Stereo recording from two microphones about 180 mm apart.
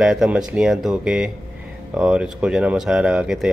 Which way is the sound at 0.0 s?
5° right (ahead or behind).